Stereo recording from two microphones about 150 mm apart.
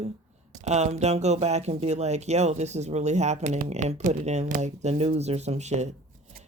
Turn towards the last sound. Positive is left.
turn(degrees=-50)  # may be behind; listen again after turning